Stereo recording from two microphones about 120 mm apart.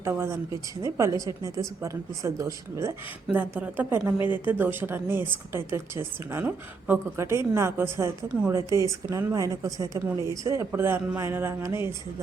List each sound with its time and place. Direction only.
0.0 s a woman's voice: 20° right (ahead or behind)
3.3 s a woman's voice: 15° right (ahead or behind)